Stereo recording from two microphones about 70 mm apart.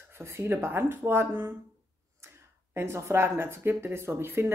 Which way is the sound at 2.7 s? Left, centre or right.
Right.